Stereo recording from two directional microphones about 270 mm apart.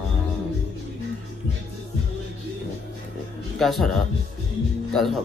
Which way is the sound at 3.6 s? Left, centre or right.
Centre.